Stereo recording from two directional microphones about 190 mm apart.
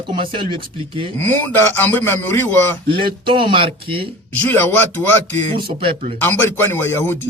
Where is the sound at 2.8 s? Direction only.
25° right (ahead or behind).